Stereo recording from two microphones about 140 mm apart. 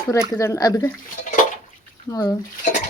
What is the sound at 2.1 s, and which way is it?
Speech, 25° left (ahead or behind).